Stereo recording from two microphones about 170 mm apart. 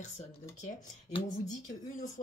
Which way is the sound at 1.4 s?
50° left (ahead or behind).